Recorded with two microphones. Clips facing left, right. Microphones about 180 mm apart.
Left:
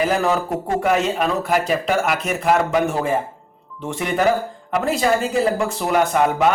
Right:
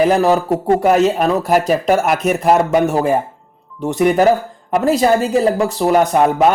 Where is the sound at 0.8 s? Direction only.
40° right (ahead or behind).